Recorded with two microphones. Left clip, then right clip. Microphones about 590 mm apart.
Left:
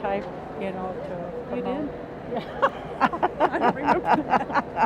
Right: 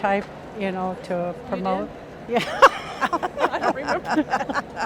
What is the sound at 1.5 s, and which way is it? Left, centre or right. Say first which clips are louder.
Speech: right 3 dB; right.